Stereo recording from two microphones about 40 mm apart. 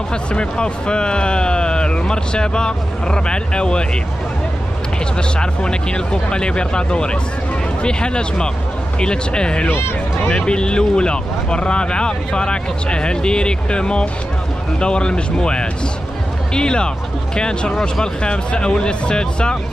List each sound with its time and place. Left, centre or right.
0.1 s speech: left
5.4 s speech: left